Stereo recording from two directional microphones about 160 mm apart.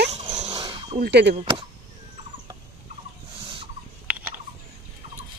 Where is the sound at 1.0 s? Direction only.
90° right.